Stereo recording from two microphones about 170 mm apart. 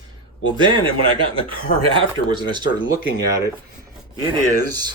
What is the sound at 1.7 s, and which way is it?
Speech, 55° left (ahead or behind).